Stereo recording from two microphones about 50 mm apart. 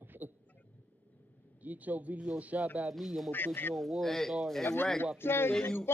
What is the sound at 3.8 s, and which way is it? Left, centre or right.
Speech, centre.